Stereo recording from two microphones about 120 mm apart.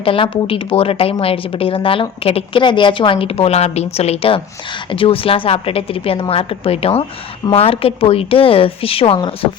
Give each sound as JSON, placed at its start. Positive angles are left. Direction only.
{"t": 0.0, "sound": "a woman's voice", "side_deg": 50}